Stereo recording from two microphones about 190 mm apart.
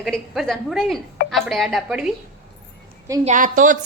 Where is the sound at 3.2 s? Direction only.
45° right (ahead or behind).